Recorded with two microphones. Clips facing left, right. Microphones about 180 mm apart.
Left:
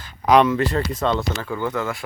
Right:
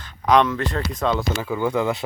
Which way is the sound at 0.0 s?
5° left (ahead or behind).